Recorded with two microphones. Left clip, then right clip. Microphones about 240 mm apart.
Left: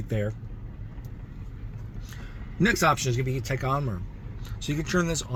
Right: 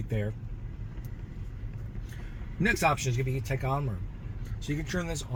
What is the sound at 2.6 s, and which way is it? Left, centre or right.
Speech, left.